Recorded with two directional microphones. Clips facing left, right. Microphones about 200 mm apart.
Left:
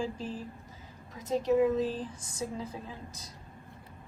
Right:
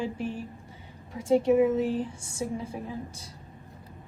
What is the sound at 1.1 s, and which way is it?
A woman's voice, 30° right (ahead or behind).